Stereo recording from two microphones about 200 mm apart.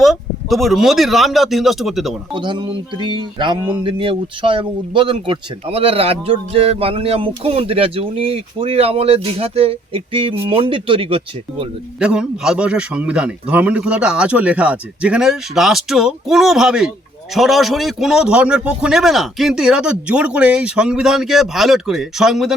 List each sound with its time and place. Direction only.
0.0 s a man's voice: centre (ahead or behind)
2.3 s speech: 25° right (ahead or behind)
11.9 s a man's voice: 5° right (ahead or behind)